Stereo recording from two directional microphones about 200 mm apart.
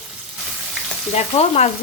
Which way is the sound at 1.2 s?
30° left (ahead or behind).